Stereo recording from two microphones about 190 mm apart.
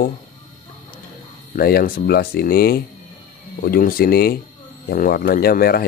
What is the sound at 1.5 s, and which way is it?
Speech, 50° left (ahead or behind).